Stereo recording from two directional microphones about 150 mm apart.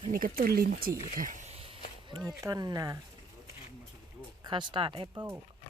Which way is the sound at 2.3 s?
25° right (ahead or behind).